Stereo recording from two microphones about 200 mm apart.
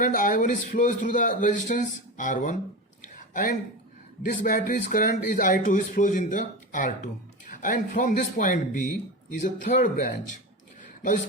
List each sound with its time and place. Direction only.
0.0 s speech: 40° left (ahead or behind)